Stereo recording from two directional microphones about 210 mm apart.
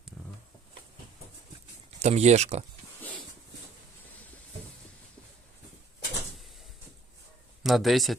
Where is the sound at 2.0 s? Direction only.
30° right (ahead or behind).